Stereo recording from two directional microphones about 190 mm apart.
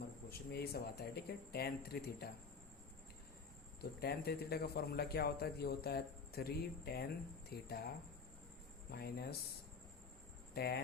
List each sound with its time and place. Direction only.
0.3 s a man's voice: 55° left (ahead or behind)
3.8 s a man's voice: 55° left (ahead or behind)
10.5 s a man's voice: 55° left (ahead or behind)